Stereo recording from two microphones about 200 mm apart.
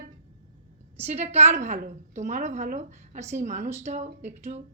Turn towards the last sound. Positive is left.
turn(degrees=-35)  # may be behind; listen again after turning